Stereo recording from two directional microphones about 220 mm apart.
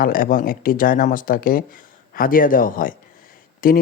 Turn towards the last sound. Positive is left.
turn(degrees=40)  # may be behind; listen again after turning